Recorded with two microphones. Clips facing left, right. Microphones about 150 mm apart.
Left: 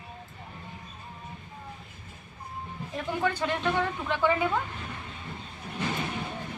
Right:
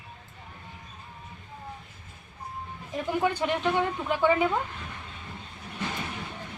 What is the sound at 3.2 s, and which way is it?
A woman's voice, 15° right (ahead or behind).